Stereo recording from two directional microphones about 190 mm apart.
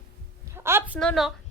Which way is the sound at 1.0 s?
Centre (ahead or behind).